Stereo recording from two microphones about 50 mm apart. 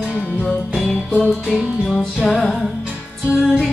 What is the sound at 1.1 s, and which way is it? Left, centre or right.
Music, left.